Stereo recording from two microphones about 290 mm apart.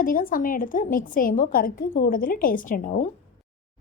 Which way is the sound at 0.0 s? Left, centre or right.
Left.